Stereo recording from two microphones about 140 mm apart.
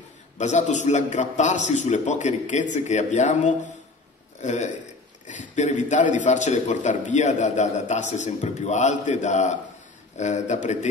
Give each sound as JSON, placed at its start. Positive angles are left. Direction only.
{"t": 0.4, "sound": "a man's voice", "side_deg": 55}